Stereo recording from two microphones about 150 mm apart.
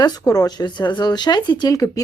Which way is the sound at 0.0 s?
25° left (ahead or behind).